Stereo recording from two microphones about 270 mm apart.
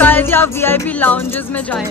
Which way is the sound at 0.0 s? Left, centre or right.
Centre.